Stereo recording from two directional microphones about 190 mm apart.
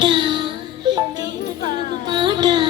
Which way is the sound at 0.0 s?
25° right (ahead or behind).